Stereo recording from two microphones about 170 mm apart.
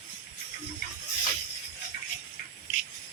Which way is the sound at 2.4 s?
55° left (ahead or behind).